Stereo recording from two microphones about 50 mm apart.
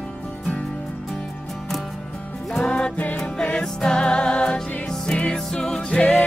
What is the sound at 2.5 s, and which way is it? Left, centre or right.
Music, centre.